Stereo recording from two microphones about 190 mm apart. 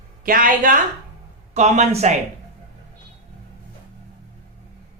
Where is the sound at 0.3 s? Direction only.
50° right (ahead or behind).